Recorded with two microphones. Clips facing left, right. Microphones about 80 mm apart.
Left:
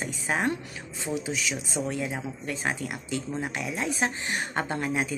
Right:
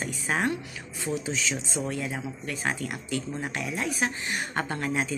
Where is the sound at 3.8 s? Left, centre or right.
Left.